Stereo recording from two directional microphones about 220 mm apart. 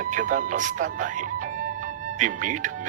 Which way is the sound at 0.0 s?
35° right (ahead or behind).